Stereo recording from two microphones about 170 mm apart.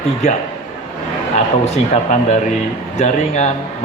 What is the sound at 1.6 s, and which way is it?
A man's voice, 40° left (ahead or behind).